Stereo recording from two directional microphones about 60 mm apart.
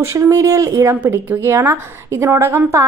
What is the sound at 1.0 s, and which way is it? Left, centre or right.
A woman's voice, right.